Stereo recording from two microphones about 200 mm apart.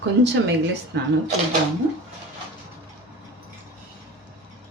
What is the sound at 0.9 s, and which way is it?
Speech, 60° right (ahead or behind).